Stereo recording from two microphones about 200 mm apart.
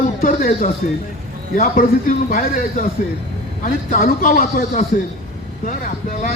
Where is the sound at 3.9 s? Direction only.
45° left (ahead or behind).